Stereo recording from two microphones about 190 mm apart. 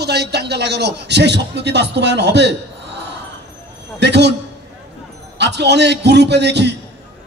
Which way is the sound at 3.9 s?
65° right (ahead or behind).